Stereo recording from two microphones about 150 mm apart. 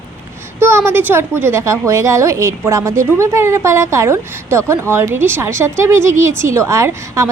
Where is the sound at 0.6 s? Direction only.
15° right (ahead or behind).